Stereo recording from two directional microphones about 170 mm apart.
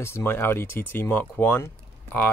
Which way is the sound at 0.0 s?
15° left (ahead or behind).